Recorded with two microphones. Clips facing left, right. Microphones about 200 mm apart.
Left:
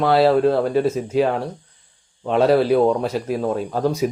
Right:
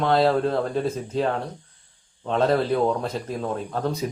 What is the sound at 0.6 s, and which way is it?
Speech, 90° left.